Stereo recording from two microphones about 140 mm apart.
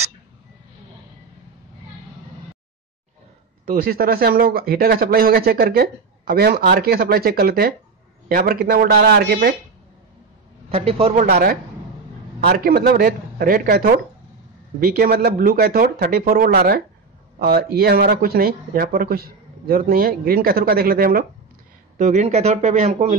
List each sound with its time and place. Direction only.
3.6 s speech: 90° right
10.7 s speech: 45° right (ahead or behind)
11.1 s speech: 90° right
21.9 s speech: 55° right (ahead or behind)